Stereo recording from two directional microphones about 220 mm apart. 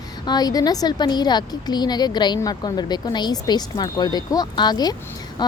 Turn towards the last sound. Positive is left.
turn(degrees=20)  # may be behind; listen again after turning